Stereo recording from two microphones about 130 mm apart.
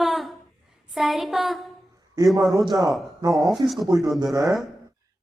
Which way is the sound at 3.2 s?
30° right (ahead or behind).